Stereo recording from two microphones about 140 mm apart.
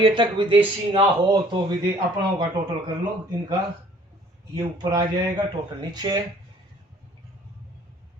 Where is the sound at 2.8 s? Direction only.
30° right (ahead or behind).